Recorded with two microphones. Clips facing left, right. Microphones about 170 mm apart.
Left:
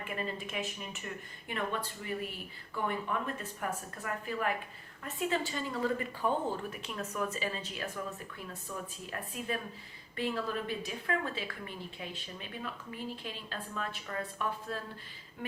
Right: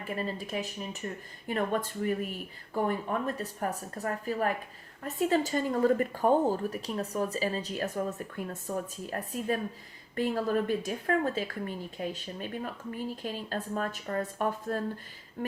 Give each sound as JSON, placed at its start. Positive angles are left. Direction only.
{"t": 0.0, "sound": "a woman's voice", "side_deg": -35}
{"t": 15.4, "sound": "music", "side_deg": -45}